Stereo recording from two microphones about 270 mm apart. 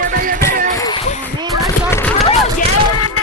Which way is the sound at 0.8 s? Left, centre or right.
Centre.